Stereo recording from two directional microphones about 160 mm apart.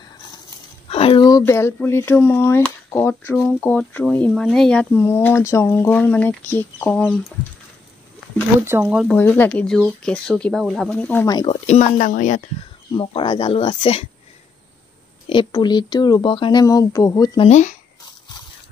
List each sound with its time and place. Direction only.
0.8 s a sound: 35° left (ahead or behind)
1.4 s speech: 15° left (ahead or behind)
8.8 s speech: 5° right (ahead or behind)
9.1 s speech: 15° left (ahead or behind)
11.2 s speech: 25° left (ahead or behind)
11.6 s speech: 45° left (ahead or behind)
12.9 s speech: 30° left (ahead or behind)
15.2 s speech: 30° left (ahead or behind)
17.4 s speech: 45° left (ahead or behind)